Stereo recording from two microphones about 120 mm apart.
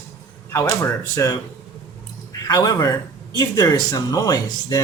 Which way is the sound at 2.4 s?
35° left (ahead or behind).